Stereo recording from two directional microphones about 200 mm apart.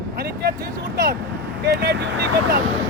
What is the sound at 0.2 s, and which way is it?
Vehicle, 50° right (ahead or behind).